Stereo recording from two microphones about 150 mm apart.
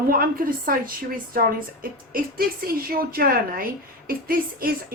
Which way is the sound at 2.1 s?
75° right (ahead or behind).